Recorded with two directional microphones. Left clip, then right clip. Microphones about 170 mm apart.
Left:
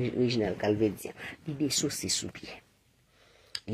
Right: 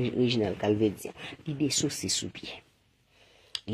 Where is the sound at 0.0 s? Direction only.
30° right (ahead or behind).